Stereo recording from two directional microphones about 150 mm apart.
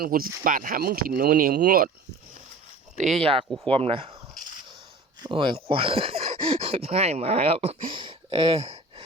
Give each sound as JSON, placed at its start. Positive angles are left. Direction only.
{"t": 0.0, "sound": "speech", "side_deg": -75}
{"t": 2.9, "sound": "speech", "side_deg": -50}
{"t": 5.2, "sound": "speech", "side_deg": -30}